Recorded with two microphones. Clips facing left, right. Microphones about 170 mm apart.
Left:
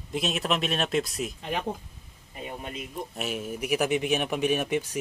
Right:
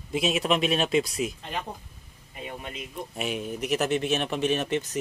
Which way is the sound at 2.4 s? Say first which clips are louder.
Left 1 dB; 35° left (ahead or behind).